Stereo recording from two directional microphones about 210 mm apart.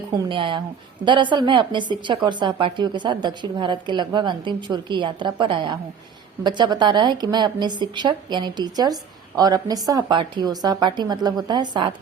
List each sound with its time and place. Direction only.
0.1 s a woman's voice: 25° right (ahead or behind)